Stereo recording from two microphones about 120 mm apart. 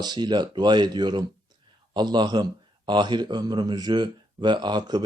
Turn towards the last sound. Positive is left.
turn(degrees=-35)  # may be behind; listen again after turning